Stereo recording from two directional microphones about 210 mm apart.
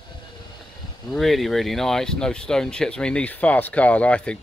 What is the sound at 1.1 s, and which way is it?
Speech, centre (ahead or behind).